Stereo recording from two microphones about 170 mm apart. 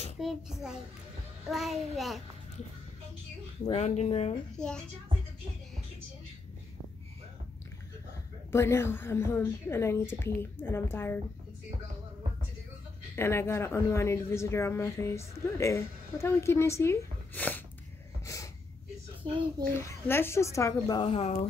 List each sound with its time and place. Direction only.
0.2 s a child's voice: centre (ahead or behind)
3.7 s speech: 40° left (ahead or behind)
4.6 s a child's voice: 5° left (ahead or behind)
8.5 s speech: 15° left (ahead or behind)
13.1 s speech: 15° left (ahead or behind)
18.2 s snort: 20° left (ahead or behind)
19.2 s a child's voice: 25° right (ahead or behind)
19.6 s speech: 15° left (ahead or behind)
21.0 s speech: 35° left (ahead or behind)